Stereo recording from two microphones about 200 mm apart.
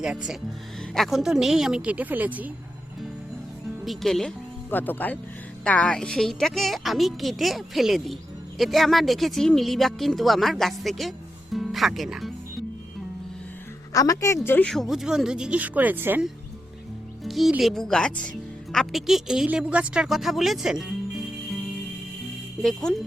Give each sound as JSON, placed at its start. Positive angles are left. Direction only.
{"t": 0.9, "sound": "speech", "side_deg": 0}
{"t": 3.8, "sound": "speech", "side_deg": 0}
{"t": 13.9, "sound": "a woman's voice", "side_deg": 15}
{"t": 22.6, "sound": "speech", "side_deg": 0}